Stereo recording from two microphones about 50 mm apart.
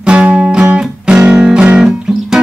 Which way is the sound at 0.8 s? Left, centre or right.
Centre.